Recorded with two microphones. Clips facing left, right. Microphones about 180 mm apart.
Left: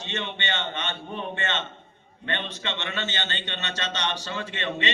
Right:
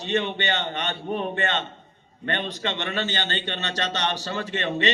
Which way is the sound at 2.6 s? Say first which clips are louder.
Right 4 dB; 40° right (ahead or behind).